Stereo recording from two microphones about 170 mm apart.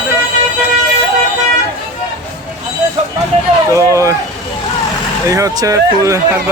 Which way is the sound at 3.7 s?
20° right (ahead or behind).